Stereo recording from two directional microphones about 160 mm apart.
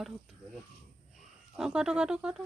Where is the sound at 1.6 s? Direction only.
5° right (ahead or behind).